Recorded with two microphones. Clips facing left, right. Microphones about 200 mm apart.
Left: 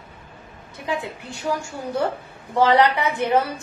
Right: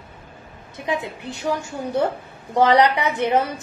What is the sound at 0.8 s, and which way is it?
Speech, 25° right (ahead or behind).